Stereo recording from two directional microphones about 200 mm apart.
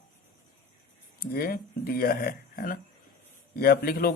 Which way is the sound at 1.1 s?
50° left (ahead or behind).